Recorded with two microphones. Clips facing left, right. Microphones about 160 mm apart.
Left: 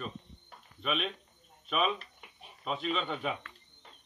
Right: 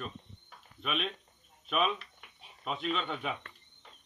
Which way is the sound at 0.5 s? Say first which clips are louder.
Left 2 dB; centre (ahead or behind).